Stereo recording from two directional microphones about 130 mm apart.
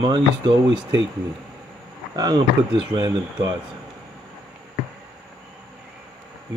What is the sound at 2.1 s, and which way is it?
Speech, 30° right (ahead or behind).